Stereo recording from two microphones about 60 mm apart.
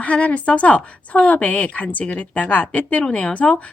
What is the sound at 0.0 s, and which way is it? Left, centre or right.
A woman's voice, left.